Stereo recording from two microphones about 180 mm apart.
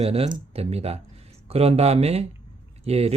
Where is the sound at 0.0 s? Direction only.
35° right (ahead or behind).